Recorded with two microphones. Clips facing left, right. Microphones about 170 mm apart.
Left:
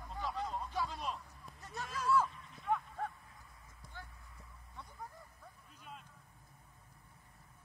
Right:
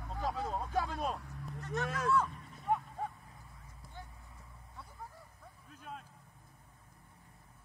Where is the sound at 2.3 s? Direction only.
40° right (ahead or behind).